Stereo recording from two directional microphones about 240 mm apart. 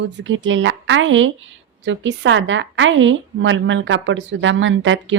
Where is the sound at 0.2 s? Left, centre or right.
Right.